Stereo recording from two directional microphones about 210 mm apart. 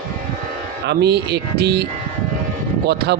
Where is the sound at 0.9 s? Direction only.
50° right (ahead or behind).